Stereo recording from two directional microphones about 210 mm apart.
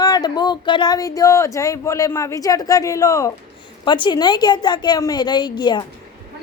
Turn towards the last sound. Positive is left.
turn(degrees=20)  # may be behind; listen again after turning